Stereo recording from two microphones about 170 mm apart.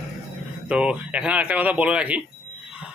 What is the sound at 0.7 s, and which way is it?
A man's voice, 5° right (ahead or behind).